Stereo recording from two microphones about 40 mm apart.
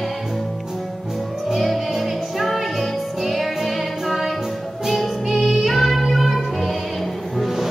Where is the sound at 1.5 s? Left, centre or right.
Centre.